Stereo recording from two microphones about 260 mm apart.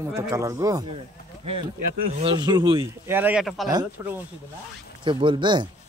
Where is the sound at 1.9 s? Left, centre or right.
Right.